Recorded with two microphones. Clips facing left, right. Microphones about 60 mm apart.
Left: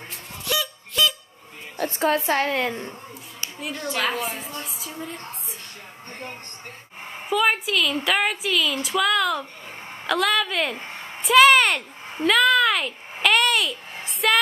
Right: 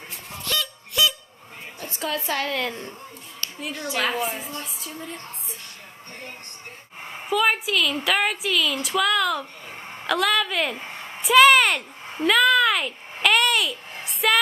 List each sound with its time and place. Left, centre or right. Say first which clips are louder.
0.4 s honk: left 2 dB; centre
1.9 s a woman's voice: left 6 dB; left; by 3.4 s centre
3.7 s a woman's voice: even; centre
7.1 s a woman's voice: even; centre